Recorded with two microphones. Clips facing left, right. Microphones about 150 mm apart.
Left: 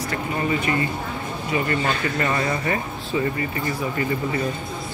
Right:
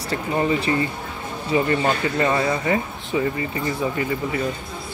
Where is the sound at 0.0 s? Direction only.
30° right (ahead or behind).